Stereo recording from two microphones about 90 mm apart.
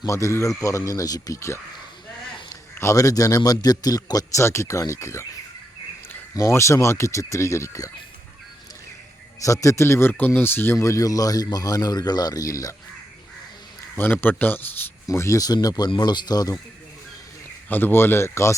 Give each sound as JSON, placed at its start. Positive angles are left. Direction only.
{"t": 0.0, "sound": "speech", "side_deg": 35}
{"t": 4.4, "sound": "speech", "side_deg": 30}
{"t": 6.3, "sound": "speech", "side_deg": 35}
{"t": 9.4, "sound": "speech", "side_deg": 35}
{"t": 13.9, "sound": "speech", "side_deg": 25}
{"t": 15.0, "sound": "speech", "side_deg": 35}
{"t": 17.7, "sound": "speech", "side_deg": 20}